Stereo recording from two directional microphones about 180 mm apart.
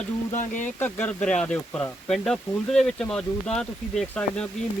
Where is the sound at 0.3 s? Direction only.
45° left (ahead or behind).